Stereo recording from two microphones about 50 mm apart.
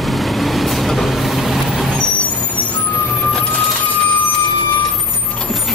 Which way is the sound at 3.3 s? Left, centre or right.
Centre.